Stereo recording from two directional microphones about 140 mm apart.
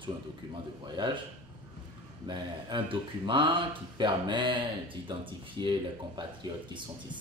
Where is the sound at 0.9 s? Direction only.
35° right (ahead or behind).